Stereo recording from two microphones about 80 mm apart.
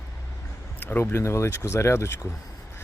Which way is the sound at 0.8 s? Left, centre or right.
Left.